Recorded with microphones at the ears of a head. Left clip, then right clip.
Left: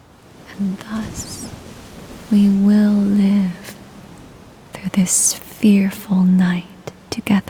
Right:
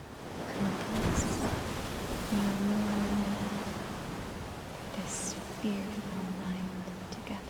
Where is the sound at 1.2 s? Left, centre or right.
Centre.